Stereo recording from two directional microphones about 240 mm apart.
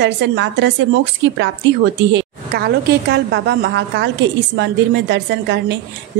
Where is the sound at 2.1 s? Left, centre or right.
Right.